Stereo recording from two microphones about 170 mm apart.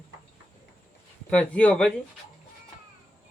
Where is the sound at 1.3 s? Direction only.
5° left (ahead or behind).